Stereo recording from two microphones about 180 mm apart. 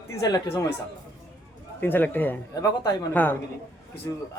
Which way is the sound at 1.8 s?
10° left (ahead or behind).